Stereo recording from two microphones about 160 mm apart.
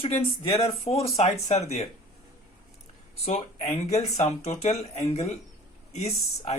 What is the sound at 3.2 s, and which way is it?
Speech, 40° left (ahead or behind).